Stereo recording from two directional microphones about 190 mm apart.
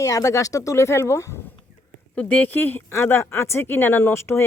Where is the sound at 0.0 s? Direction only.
15° left (ahead or behind).